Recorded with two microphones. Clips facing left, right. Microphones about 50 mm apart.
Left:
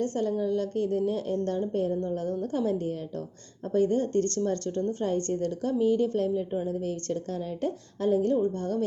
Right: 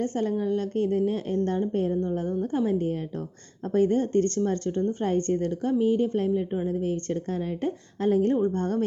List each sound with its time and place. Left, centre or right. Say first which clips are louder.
0.0 s a woman's voice: right 1 dB; right